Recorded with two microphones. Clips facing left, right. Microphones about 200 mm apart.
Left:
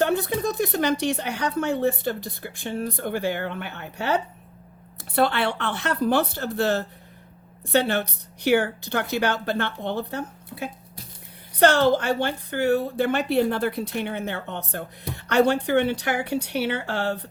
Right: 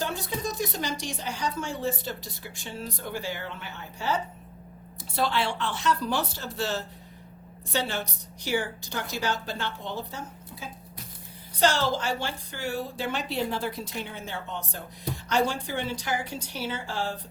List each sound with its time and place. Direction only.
0.0 s a woman's voice: 60° left (ahead or behind)